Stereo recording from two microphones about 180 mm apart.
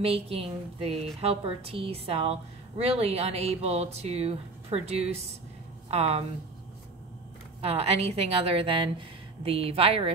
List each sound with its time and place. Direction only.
0.0 s a woman's voice: 30° right (ahead or behind)
7.6 s a woman's voice: 35° right (ahead or behind)